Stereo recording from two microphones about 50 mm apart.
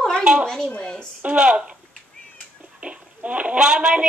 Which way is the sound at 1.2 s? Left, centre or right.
Centre.